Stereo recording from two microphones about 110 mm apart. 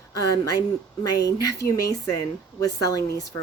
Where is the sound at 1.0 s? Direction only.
30° left (ahead or behind).